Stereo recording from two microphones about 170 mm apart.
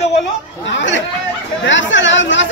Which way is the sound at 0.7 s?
90° left.